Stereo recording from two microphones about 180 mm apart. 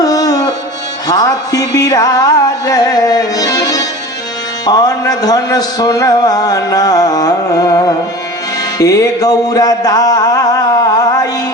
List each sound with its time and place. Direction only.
0.0 s music: 20° left (ahead or behind)
4.6 s a man's voice: 20° left (ahead or behind)
8.8 s music: 20° left (ahead or behind)